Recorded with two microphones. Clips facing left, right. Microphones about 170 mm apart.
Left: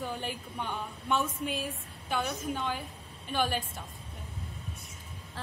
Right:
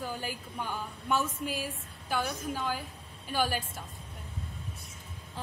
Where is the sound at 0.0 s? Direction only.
5° right (ahead or behind).